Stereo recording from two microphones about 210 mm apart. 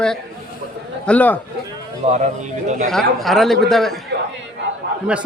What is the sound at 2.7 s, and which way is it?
Speech, 40° right (ahead or behind).